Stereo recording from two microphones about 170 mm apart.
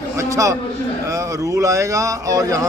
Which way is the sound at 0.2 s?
20° right (ahead or behind).